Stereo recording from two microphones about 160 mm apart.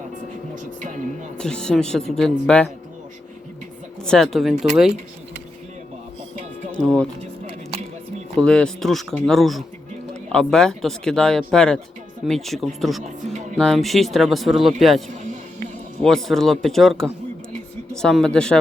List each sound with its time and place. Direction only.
1.4 s speech: 5° left (ahead or behind)
4.0 s speech: 5° left (ahead or behind)
6.7 s speech: 5° left (ahead or behind)
8.4 s speech: 5° left (ahead or behind)
13.0 s music: 50° right (ahead or behind)
13.6 s speech: centre (ahead or behind)